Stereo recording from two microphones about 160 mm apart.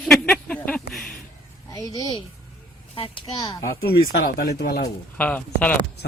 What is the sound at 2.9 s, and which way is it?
Speech, 35° left (ahead or behind).